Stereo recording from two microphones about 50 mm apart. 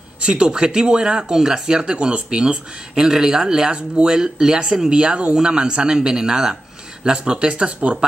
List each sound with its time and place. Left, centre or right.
0.2 s speech: centre